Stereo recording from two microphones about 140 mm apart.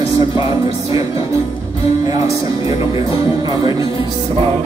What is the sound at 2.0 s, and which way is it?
Music, 25° right (ahead or behind).